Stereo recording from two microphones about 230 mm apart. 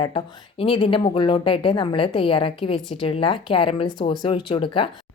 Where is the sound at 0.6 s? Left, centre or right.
Left.